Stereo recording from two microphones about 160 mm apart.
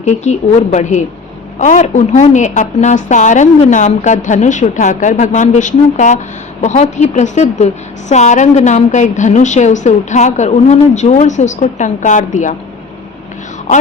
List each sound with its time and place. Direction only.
0.0 s a woman's voice: 45° left (ahead or behind)